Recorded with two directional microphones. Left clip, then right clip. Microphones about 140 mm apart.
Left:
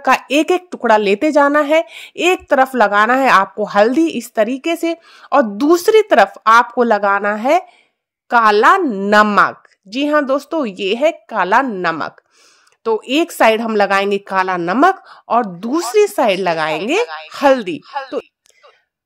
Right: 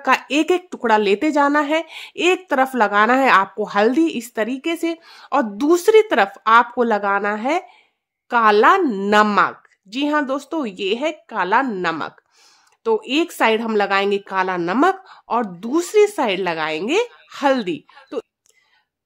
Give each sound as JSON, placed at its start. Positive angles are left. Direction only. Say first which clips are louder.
{"t": 0.0, "sound": "speech", "louder": "left 4 dB", "side_deg": 30}
{"t": 8.8, "sound": "speech", "louder": "left 2 dB", "side_deg": 15}
{"t": 9.1, "sound": "speech", "louder": "left 4 dB", "side_deg": 35}